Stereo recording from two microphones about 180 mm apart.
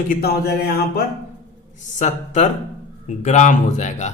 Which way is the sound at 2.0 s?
40° left (ahead or behind).